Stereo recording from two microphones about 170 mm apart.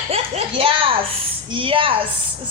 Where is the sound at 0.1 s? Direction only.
35° right (ahead or behind).